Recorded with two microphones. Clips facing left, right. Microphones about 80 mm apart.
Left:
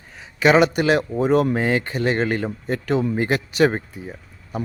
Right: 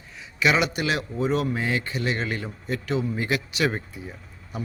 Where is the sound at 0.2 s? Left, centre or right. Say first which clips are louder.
Left 7 dB; left.